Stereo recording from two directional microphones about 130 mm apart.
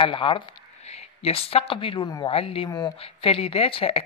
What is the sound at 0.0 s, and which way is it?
Speech, 40° left (ahead or behind).